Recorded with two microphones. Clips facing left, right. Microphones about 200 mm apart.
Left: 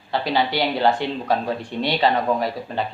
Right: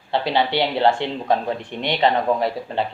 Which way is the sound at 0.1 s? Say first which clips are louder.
Right 1 dB; 25° right (ahead or behind).